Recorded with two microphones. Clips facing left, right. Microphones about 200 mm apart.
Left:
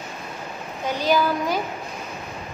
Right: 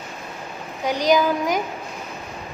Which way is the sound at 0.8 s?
15° right (ahead or behind).